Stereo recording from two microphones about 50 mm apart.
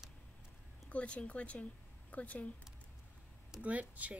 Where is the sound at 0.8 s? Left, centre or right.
Left.